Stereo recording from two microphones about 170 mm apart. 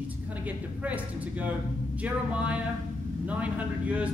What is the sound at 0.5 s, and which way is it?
Speech, 10° right (ahead or behind).